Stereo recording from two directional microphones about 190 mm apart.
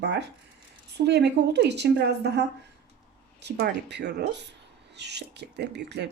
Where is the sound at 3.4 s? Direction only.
65° right (ahead or behind).